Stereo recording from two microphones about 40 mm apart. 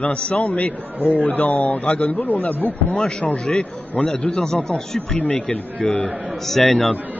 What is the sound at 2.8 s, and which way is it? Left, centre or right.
A man's voice, left.